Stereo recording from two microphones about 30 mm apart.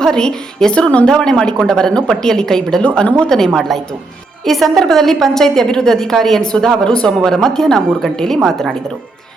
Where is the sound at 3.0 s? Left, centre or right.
Left.